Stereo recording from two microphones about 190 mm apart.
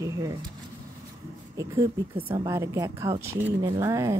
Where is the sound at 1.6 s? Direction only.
15° right (ahead or behind).